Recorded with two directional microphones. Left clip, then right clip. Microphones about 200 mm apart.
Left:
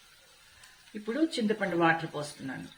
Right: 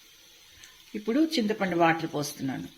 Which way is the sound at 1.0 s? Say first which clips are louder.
Right 3 dB; 30° right (ahead or behind).